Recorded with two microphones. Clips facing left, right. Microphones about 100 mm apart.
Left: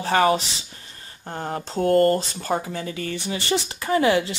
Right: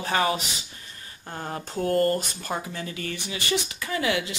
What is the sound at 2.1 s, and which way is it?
Speech, 35° left (ahead or behind).